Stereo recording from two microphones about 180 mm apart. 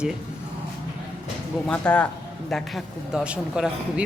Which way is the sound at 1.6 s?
5° left (ahead or behind).